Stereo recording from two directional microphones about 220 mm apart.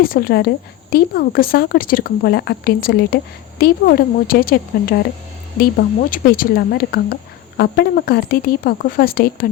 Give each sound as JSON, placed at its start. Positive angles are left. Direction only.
{"t": 0.0, "sound": "a woman's voice", "side_deg": 40}
{"t": 6.1, "sound": "a woman's voice", "side_deg": 40}